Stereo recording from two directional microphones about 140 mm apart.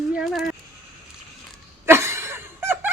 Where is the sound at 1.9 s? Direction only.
20° right (ahead or behind).